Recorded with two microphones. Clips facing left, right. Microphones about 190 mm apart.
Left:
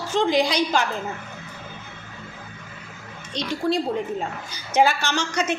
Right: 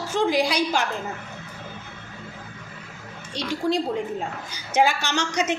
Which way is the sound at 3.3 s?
15° right (ahead or behind).